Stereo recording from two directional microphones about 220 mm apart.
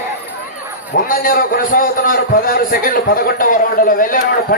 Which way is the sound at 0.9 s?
40° left (ahead or behind).